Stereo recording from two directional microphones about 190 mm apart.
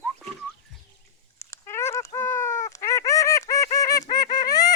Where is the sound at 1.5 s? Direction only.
15° left (ahead or behind).